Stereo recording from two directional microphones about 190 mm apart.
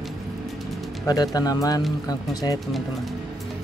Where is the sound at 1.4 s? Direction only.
20° left (ahead or behind).